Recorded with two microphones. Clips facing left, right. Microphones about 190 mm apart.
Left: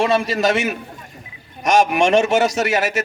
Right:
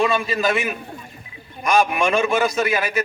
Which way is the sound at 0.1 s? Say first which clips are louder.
Left 3 dB; 80° left.